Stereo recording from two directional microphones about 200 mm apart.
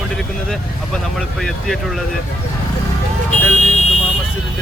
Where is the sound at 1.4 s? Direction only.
Centre (ahead or behind).